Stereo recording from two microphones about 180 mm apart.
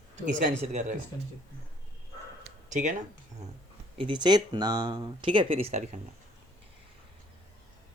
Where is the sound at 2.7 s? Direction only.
45° right (ahead or behind).